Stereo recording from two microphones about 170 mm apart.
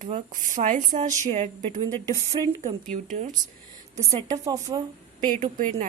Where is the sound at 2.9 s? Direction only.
50° right (ahead or behind).